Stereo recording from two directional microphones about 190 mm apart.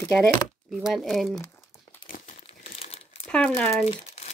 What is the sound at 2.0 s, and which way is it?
Crumpling, 45° left (ahead or behind).